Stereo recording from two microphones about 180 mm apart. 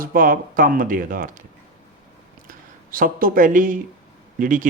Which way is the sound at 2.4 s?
50° right (ahead or behind).